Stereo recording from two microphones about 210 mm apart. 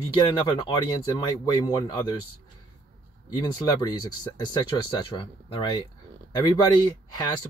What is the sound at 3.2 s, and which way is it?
Speech, 20° left (ahead or behind).